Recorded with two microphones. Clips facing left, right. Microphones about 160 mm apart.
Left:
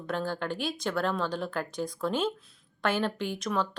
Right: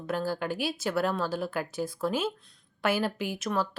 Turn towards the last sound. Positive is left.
turn(degrees=-5)  # may be behind; listen again after turning